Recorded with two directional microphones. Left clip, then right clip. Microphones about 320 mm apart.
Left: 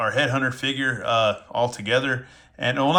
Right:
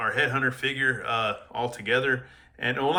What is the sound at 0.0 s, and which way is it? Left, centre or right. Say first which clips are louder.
Speech: left 3 dB; centre.